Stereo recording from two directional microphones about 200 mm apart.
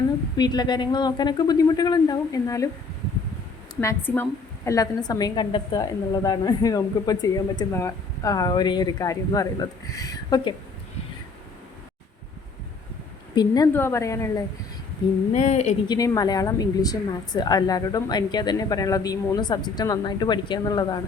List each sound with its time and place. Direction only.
0.3 s a woman's voice: 20° left (ahead or behind)
3.8 s a woman's voice: 10° left (ahead or behind)
13.3 s a woman's voice: 20° left (ahead or behind)
15.3 s speech: 35° left (ahead or behind)
15.9 s a woman's voice: 15° left (ahead or behind)